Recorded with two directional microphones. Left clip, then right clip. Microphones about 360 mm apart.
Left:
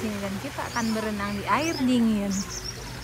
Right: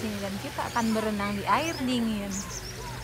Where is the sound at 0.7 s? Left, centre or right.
Centre.